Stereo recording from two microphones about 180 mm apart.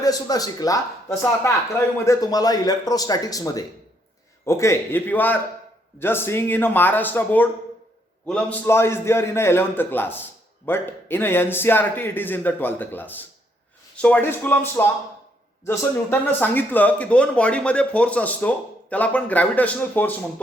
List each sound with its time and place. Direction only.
0.0 s speech: 20° left (ahead or behind)